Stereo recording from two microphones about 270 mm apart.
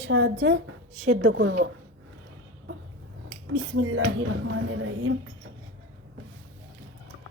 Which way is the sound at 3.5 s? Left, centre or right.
Right.